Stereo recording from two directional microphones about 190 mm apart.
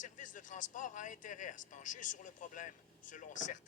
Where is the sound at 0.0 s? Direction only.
40° left (ahead or behind).